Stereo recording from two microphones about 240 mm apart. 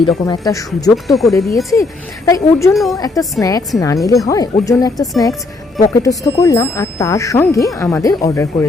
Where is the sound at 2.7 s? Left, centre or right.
Centre.